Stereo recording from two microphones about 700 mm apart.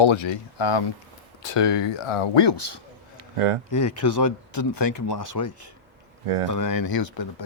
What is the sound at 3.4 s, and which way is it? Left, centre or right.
Speech, right.